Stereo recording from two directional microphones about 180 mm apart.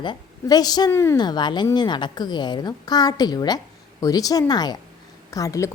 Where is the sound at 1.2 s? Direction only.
25° left (ahead or behind).